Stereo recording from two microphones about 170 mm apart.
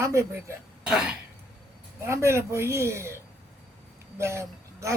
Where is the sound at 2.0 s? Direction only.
15° right (ahead or behind).